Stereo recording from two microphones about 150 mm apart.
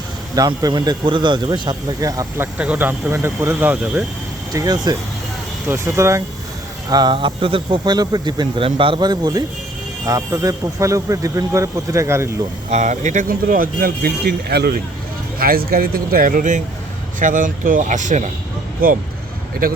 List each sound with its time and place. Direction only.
0.3 s speech: 25° right (ahead or behind)
2.6 s speech: 10° right (ahead or behind)
4.5 s speech: 25° right (ahead or behind)
6.9 s speech: 30° right (ahead or behind)
12.7 s speech: 50° right (ahead or behind); by 14.8 s 90° right
15.4 s speech: 75° right (ahead or behind); by 18.3 s 55° right (ahead or behind)
18.8 s speech: 75° right (ahead or behind)